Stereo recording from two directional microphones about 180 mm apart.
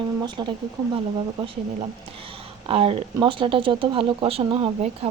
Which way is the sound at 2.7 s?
30° right (ahead or behind).